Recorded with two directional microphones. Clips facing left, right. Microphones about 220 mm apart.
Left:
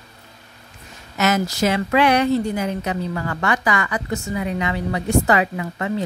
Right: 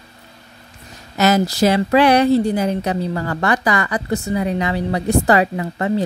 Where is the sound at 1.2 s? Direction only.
35° right (ahead or behind).